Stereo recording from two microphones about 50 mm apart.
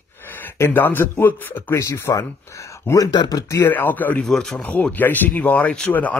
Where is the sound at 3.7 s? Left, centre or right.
Left.